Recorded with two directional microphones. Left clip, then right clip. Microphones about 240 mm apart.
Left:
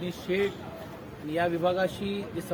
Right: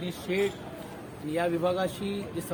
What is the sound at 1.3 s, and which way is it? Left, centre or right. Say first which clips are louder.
Speech: left 1 dB; centre.